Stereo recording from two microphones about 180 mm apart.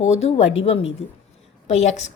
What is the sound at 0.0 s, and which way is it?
A woman's voice, 35° left (ahead or behind).